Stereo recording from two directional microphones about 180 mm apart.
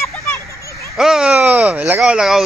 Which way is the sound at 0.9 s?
5° right (ahead or behind).